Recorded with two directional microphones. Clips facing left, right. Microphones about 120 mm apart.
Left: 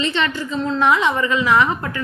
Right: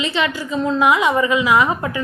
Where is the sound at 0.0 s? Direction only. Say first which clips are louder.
Even; 10° right (ahead or behind).